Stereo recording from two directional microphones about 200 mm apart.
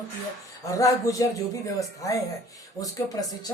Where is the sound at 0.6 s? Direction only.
15° left (ahead or behind).